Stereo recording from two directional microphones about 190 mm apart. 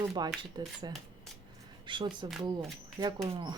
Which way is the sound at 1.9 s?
25° right (ahead or behind).